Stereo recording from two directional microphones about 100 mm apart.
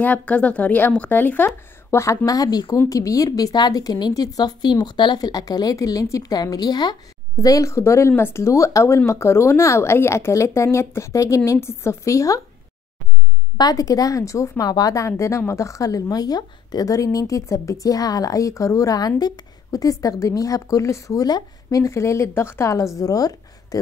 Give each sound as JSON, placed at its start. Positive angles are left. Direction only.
{"t": 0.0, "sound": "a woman's voice", "side_deg": 15}
{"t": 7.3, "sound": "speech", "side_deg": 35}
{"t": 13.6, "sound": "a woman's voice", "side_deg": 40}